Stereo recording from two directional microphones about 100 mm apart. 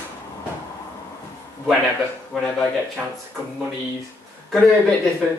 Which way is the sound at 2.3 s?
10° left (ahead or behind).